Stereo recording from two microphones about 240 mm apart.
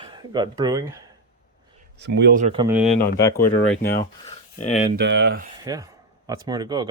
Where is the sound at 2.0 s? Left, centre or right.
Right.